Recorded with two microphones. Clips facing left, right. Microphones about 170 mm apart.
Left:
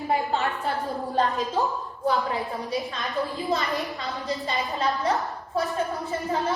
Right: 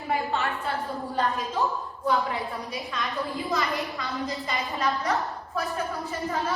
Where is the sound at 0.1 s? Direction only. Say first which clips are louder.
Left 2 dB; 35° left (ahead or behind).